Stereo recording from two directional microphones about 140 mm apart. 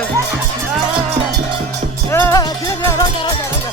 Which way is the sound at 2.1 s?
15° left (ahead or behind).